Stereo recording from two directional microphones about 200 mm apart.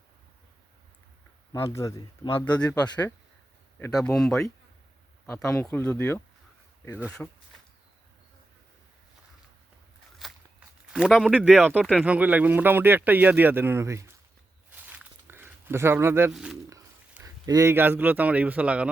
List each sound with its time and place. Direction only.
1.5 s speech: 15° left (ahead or behind)
3.8 s speech: 10° left (ahead or behind)
10.2 s a sound: centre (ahead or behind)
10.9 s speech: 5° right (ahead or behind)
14.8 s a sound: 10° right (ahead or behind)
16.3 s speech: centre (ahead or behind)
17.2 s speech: 15° right (ahead or behind)